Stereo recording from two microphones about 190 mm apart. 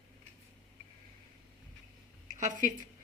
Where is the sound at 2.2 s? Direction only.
40° right (ahead or behind).